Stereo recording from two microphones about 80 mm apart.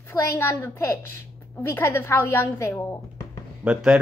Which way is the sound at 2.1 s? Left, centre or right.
Left.